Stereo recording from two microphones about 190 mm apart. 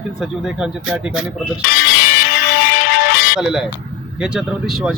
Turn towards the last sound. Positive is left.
turn(degrees=0)  # may be behind; listen again after turning